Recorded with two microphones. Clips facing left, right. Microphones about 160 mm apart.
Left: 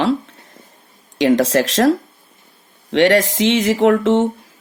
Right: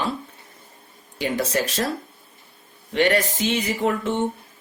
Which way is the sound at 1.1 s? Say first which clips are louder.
Left 10 dB; 90° left.